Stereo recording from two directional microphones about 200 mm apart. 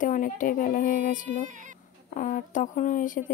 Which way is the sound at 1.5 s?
40° right (ahead or behind).